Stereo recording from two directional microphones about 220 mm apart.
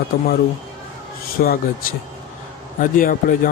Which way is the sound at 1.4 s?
45° left (ahead or behind).